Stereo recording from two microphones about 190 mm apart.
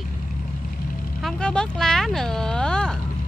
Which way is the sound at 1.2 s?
5° left (ahead or behind).